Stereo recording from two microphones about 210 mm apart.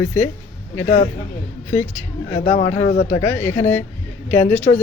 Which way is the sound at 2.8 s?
30° left (ahead or behind).